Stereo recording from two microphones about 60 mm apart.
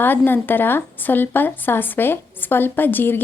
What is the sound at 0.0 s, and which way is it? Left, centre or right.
Speech, left.